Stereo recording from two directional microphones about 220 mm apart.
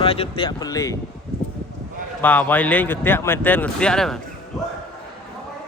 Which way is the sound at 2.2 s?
10° left (ahead or behind).